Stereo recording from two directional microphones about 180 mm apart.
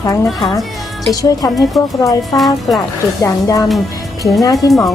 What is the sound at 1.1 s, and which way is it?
A woman's voice, 20° left (ahead or behind).